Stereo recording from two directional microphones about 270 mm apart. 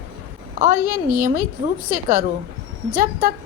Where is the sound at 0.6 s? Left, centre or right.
Right.